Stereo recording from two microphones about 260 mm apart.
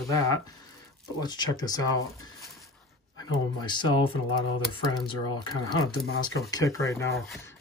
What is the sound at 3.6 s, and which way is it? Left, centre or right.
Speech, centre.